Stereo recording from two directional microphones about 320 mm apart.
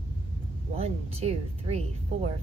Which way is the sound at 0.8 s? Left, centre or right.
Centre.